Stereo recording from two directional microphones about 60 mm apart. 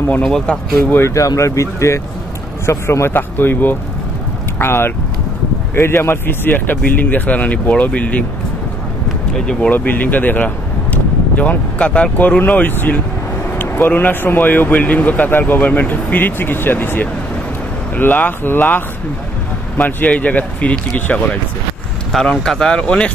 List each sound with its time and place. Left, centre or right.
0.2 s speech: centre
1.1 s speech: left
3.1 s a man's voice: left
9.3 s speech: centre
9.7 s a man's voice: left
19.8 s speech: left
22.2 s speech: centre